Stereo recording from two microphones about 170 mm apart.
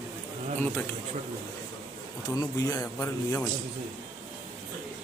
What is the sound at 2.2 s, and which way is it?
A man's voice, 20° left (ahead or behind).